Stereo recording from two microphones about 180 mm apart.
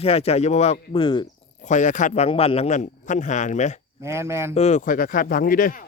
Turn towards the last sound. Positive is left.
turn(degrees=50)  # may be behind; listen again after turning